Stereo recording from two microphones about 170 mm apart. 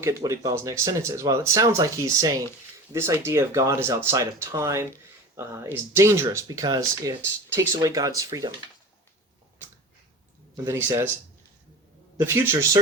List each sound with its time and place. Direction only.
0.0 s speech: 20° right (ahead or behind)
10.7 s speech: 15° right (ahead or behind)
12.1 s speech: 15° right (ahead or behind)